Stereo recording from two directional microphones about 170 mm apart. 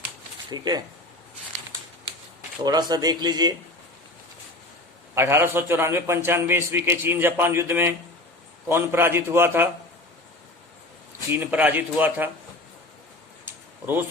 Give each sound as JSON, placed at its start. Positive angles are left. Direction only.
{"t": 0.5, "sound": "speech", "side_deg": -25}
{"t": 2.6, "sound": "speech", "side_deg": -20}
{"t": 5.1, "sound": "a man's voice", "side_deg": -15}
{"t": 11.3, "sound": "a man's voice", "side_deg": -10}
{"t": 13.4, "sound": "a sound", "side_deg": -10}